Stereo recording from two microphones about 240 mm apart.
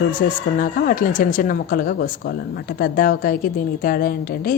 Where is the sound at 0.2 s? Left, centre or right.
Left.